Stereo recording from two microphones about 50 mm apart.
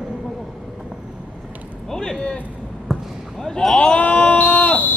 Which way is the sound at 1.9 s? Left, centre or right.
Centre.